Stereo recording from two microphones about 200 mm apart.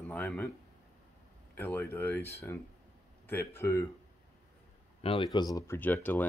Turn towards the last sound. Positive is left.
turn(degrees=10)  # may be behind; listen again after turning